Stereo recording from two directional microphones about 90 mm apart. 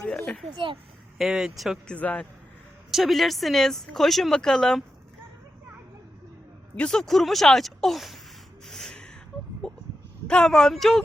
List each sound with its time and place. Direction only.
0.5 s speech: 70° right (ahead or behind)
1.2 s speech: 5° right (ahead or behind)
1.9 s a man's voice: 15° left (ahead or behind)
2.9 s speech: centre (ahead or behind)
6.7 s speech: 10° left (ahead or behind)
8.6 s a sound: 5° left (ahead or behind)
10.2 s speech: 5° left (ahead or behind)